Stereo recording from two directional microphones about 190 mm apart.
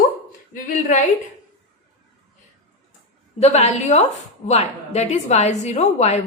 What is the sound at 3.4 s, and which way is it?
A woman's voice, 35° left (ahead or behind).